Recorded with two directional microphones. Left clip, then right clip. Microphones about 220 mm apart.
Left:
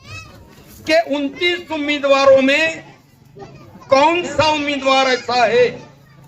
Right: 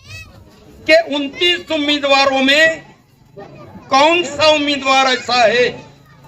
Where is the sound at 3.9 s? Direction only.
35° right (ahead or behind).